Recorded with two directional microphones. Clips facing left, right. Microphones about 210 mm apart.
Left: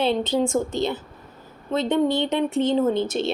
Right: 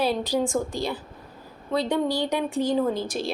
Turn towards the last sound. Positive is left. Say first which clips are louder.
# left 4 dB
turn(degrees=25)  # may be behind; listen again after turning